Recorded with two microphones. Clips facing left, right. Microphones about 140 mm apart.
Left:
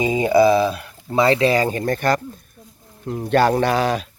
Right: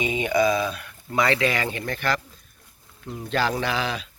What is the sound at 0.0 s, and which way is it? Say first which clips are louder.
Speech: left 7 dB; 35° left (ahead or behind).